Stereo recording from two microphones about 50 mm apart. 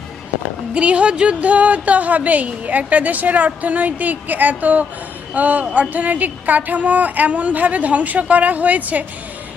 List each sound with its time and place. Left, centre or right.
0.7 s speech: right
5.6 s speech: right
5.9 s speech: right